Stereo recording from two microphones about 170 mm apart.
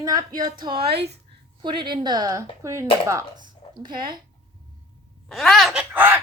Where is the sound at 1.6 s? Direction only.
30° right (ahead or behind).